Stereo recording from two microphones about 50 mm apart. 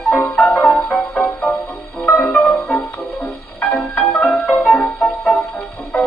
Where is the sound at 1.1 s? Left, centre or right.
Left.